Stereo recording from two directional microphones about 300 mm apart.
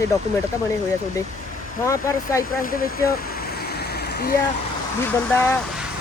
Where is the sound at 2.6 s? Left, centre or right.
Left.